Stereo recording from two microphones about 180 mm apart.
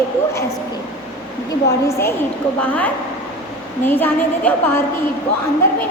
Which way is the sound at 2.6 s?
10° left (ahead or behind).